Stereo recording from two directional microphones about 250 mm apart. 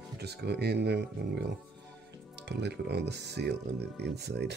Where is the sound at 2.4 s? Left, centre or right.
Right.